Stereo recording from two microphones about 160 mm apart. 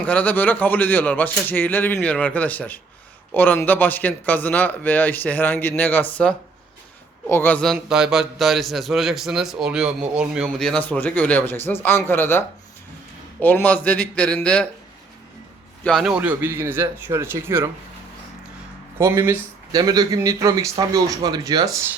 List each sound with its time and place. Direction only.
0.0 s a man's voice: 10° left (ahead or behind)
15.8 s a man's voice: centre (ahead or behind); by 17.7 s 15° right (ahead or behind)
18.9 s a man's voice: 15° right (ahead or behind)
19.7 s a man's voice: 25° right (ahead or behind)